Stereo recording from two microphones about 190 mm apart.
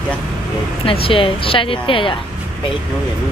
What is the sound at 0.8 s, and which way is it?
Speech, 30° left (ahead or behind).